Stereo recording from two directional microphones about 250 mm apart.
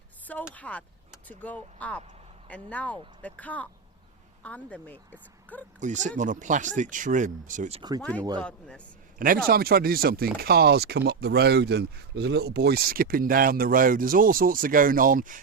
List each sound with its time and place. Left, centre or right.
0.3 s speech: centre
5.8 s speech: right
7.8 s speech: centre
8.4 s speech: centre
9.1 s speech: right